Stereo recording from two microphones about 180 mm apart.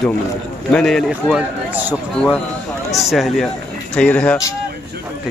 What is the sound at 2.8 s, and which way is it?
A man's voice, centre (ahead or behind).